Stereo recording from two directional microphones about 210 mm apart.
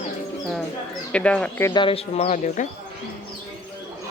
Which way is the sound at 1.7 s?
25° left (ahead or behind).